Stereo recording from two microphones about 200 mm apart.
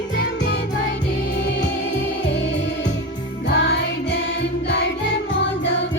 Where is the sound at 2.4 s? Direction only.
65° left (ahead or behind).